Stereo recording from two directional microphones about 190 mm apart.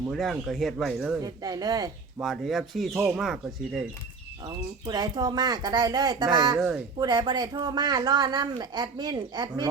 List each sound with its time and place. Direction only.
0.1 s speech: centre (ahead or behind)
1.2 s a woman's voice: 20° right (ahead or behind)
2.1 s speech: centre (ahead or behind)
4.4 s a woman's voice: 20° right (ahead or behind)
6.6 s speech: 5° right (ahead or behind)
7.0 s a woman's voice: 20° right (ahead or behind)